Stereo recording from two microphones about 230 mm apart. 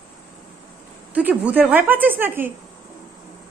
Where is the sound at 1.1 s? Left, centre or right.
Centre.